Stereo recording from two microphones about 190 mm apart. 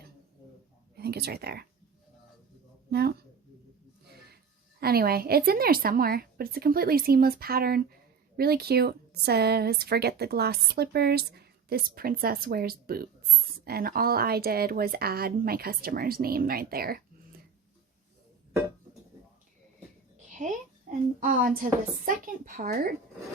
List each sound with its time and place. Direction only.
0.9 s speech: 55° right (ahead or behind)
4.8 s speech: 55° right (ahead or behind)
21.2 s speech: 45° right (ahead or behind)